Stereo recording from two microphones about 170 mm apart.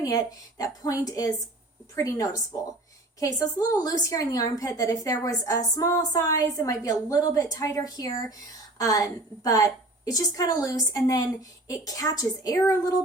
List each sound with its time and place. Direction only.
0.0 s a woman's voice: 20° left (ahead or behind)